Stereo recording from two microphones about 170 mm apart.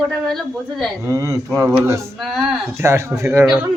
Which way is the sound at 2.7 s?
15° right (ahead or behind).